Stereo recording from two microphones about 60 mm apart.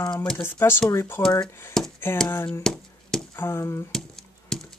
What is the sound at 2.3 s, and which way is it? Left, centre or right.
Speech, left.